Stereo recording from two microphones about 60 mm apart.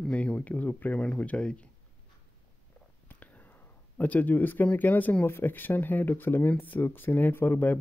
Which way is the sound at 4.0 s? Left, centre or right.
Left.